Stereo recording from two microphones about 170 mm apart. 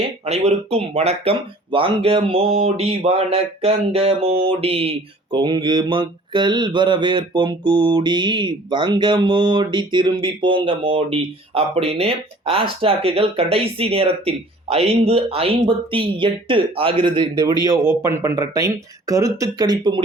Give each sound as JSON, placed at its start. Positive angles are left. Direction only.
{"t": 0.3, "sound": "speech", "side_deg": -40}